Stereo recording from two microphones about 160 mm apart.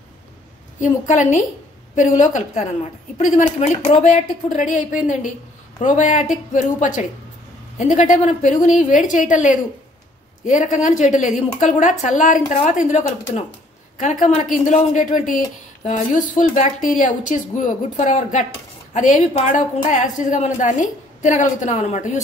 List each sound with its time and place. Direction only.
0.7 s a woman's voice: 50° left (ahead or behind)
5.9 s a woman's voice: 50° left (ahead or behind)